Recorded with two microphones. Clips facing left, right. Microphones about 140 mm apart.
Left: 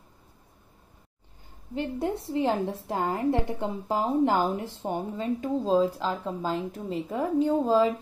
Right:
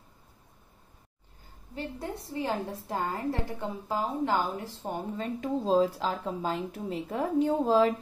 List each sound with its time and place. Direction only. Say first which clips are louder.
1.8 s a woman's voice: left 7 dB; 25° left (ahead or behind)
4.8 s speech: left 4 dB; 10° left (ahead or behind)